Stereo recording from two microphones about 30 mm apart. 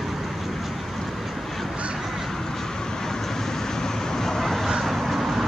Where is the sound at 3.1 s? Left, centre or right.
Centre.